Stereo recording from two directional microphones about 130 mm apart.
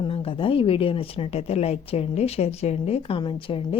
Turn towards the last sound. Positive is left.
turn(degrees=45)  # may be behind; listen again after turning